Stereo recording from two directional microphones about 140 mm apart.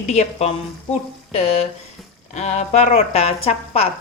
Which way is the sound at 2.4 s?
55° left (ahead or behind).